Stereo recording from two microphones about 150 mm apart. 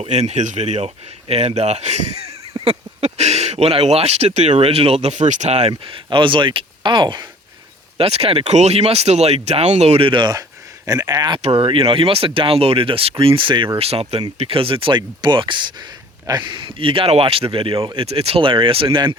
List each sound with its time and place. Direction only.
0.0 s speech: 45° right (ahead or behind); by 7.3 s 30° right (ahead or behind)
7.9 s speech: 40° right (ahead or behind); by 11.3 s 25° right (ahead or behind)
11.4 s speech: 40° right (ahead or behind)
18.0 s speech: 40° right (ahead or behind)